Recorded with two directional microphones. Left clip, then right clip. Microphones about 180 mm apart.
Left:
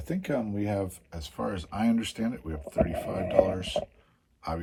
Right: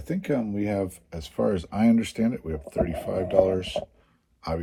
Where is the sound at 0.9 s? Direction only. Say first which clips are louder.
Right 4 dB; 25° right (ahead or behind).